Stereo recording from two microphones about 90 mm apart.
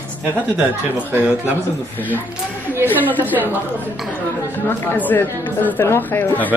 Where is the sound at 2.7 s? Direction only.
20° right (ahead or behind).